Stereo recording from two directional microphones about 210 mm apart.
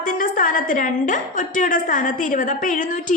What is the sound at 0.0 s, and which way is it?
A woman's voice, 40° left (ahead or behind).